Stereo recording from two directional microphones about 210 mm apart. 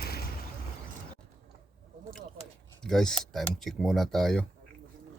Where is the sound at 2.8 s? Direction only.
Centre (ahead or behind).